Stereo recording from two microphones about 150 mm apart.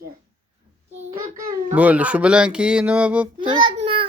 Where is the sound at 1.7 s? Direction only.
10° right (ahead or behind).